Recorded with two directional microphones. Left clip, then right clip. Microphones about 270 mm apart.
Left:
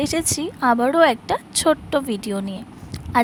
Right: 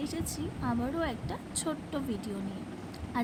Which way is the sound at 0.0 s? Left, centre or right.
Left.